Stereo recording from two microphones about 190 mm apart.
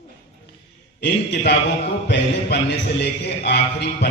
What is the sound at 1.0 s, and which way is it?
A man's voice, 65° left (ahead or behind).